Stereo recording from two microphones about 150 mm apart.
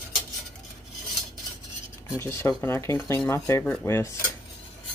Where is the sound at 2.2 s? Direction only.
20° left (ahead or behind).